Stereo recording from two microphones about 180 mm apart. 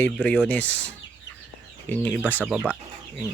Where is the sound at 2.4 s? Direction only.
10° right (ahead or behind).